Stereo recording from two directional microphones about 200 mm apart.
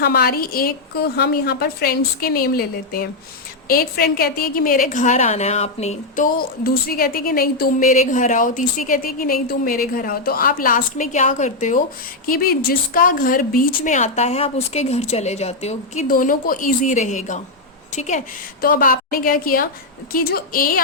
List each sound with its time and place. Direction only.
0.0 s a woman's voice: 50° left (ahead or behind); by 6.2 s 35° left (ahead or behind)
6.3 s a woman's voice: 50° left (ahead or behind)